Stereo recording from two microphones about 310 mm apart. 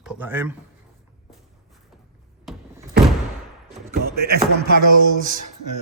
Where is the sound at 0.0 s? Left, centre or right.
Centre.